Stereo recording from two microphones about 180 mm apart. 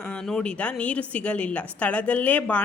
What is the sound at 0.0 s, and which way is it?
A woman's voice, 5° left (ahead or behind).